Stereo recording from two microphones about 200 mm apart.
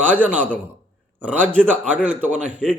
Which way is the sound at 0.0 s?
10° right (ahead or behind).